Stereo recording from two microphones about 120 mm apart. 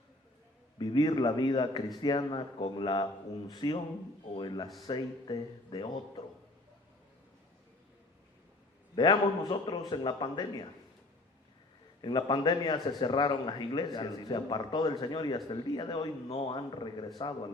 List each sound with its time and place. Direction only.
0.8 s a man's voice: 35° left (ahead or behind)
9.0 s a man's voice: 40° left (ahead or behind)
12.0 s a man's voice: 40° left (ahead or behind)